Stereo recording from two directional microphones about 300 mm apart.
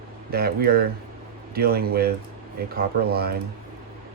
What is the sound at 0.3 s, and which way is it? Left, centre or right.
Speech, right.